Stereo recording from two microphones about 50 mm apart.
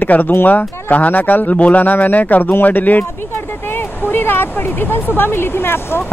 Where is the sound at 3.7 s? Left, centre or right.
Left.